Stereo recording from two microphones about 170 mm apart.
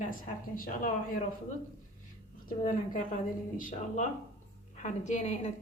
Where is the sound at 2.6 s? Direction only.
50° left (ahead or behind).